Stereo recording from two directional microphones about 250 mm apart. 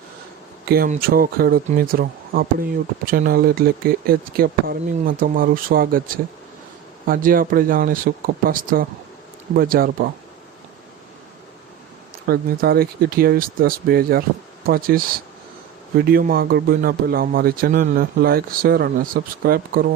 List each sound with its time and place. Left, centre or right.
0.6 s a man's voice: right
12.3 s a man's voice: right